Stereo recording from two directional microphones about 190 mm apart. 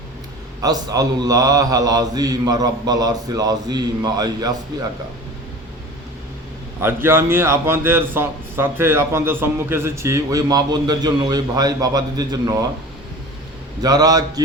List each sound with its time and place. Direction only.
0.6 s a man's voice: 20° right (ahead or behind)
6.8 s a man's voice: 10° right (ahead or behind)
13.8 s a man's voice: 20° right (ahead or behind)